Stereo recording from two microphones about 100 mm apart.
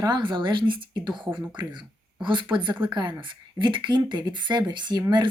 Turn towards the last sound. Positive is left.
turn(degrees=-50)  # may be behind; listen again after turning